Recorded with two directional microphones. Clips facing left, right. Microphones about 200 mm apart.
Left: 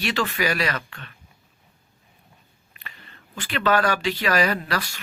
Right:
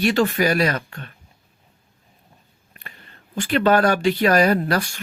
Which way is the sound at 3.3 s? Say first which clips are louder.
Right 5 dB; 45° right (ahead or behind).